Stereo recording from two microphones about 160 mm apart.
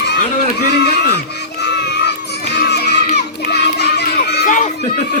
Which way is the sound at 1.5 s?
90° left.